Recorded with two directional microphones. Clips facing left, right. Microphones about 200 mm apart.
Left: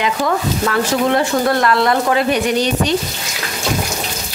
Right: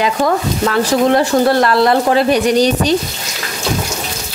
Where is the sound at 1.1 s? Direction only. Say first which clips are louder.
Right 4 dB; 35° right (ahead or behind).